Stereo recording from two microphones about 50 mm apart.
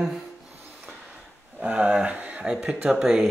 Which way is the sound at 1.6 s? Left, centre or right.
Right.